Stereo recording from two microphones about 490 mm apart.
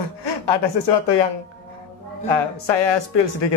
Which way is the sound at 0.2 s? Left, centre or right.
Left.